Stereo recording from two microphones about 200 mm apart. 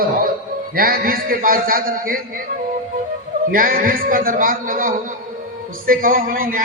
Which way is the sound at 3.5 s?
45° right (ahead or behind).